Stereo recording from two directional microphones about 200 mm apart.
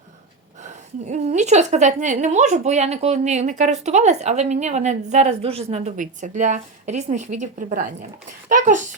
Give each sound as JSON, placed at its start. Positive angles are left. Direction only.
{"t": 1.0, "sound": "speech", "side_deg": -35}